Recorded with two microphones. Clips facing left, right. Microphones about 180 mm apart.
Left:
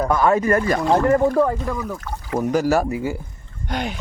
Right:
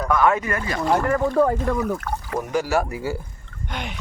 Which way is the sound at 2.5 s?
40° left (ahead or behind).